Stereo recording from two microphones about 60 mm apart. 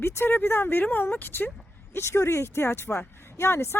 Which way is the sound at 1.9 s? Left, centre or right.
Left.